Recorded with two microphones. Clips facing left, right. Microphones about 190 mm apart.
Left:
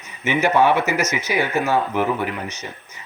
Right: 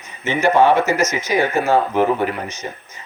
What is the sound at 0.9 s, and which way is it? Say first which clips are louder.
Speech: right 3 dB; 15° left (ahead or behind).